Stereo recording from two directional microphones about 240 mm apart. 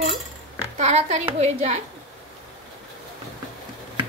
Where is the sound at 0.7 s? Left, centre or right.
Right.